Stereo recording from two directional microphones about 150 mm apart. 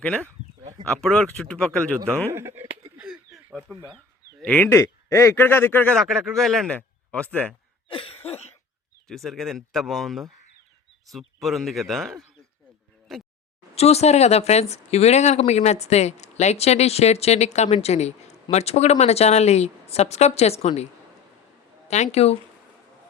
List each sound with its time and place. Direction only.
0.6 s a sound: 30° right (ahead or behind)
0.9 s speech: 5° left (ahead or behind)
2.3 s speech: 15° right (ahead or behind)
3.0 s a sound: centre (ahead or behind)
4.4 s speech: 10° left (ahead or behind)
6.0 s speech: centre (ahead or behind)
7.9 s cough: 35° left (ahead or behind)
9.0 s speech: centre (ahead or behind)
13.1 s a sound: centre (ahead or behind)
13.7 s speech: 45° left (ahead or behind)
21.8 s speech: 50° left (ahead or behind)